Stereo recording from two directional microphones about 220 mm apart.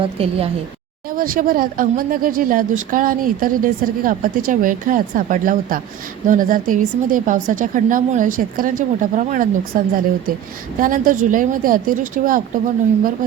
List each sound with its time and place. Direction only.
0.0 s a woman's voice: 25° right (ahead or behind)
1.1 s speech: 40° right (ahead or behind)